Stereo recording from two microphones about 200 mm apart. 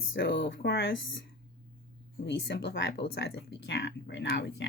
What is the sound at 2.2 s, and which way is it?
Speech, 60° left (ahead or behind).